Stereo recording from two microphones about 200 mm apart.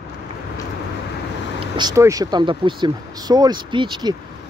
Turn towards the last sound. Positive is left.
turn(degrees=-25)  # may be behind; listen again after turning